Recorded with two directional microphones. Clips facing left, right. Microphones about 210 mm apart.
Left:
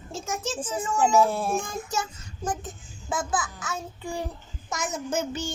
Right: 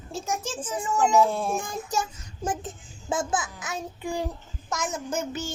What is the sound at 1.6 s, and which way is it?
Child singing, 15° right (ahead or behind).